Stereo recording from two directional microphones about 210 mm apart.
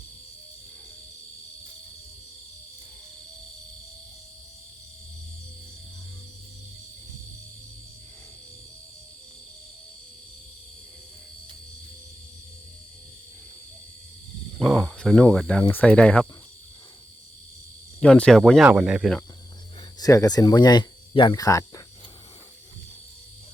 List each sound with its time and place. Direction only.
14.6 s speech: centre (ahead or behind)
18.0 s speech: 5° left (ahead or behind)
20.0 s speech: 15° left (ahead or behind)